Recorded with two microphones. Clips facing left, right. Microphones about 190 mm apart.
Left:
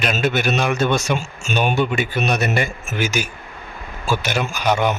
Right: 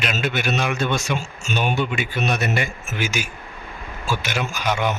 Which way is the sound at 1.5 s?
50° left (ahead or behind).